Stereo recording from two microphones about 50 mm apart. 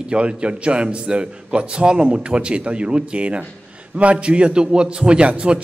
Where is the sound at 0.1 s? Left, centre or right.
Right.